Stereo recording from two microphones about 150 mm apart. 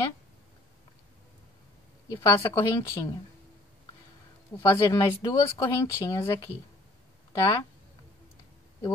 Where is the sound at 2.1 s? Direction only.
20° left (ahead or behind).